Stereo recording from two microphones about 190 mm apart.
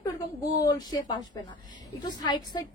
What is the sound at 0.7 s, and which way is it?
A woman's voice, 20° left (ahead or behind).